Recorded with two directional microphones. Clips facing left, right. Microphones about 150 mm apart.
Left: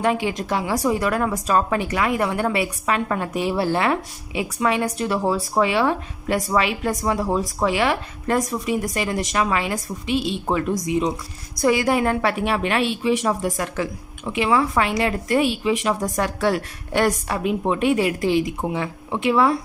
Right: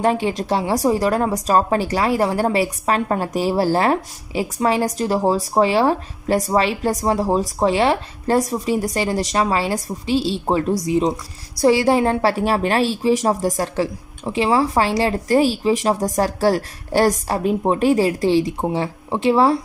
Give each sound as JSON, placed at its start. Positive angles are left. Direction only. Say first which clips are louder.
{"t": 0.0, "sound": "a woman's voice", "louder": "right 3 dB", "side_deg": -35}